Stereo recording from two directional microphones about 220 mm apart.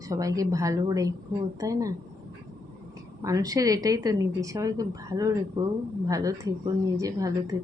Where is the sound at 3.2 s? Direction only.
15° right (ahead or behind).